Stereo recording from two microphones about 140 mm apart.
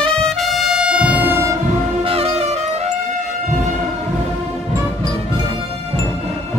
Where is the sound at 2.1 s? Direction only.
45° right (ahead or behind).